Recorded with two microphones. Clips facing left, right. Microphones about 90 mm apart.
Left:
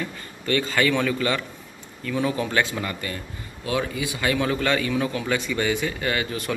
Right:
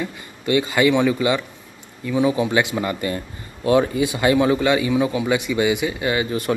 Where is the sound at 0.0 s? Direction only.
15° right (ahead or behind).